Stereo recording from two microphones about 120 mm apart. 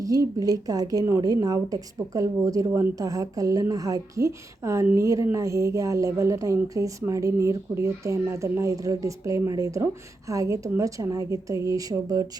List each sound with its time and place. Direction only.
0.0 s a woman's voice: 30° right (ahead or behind)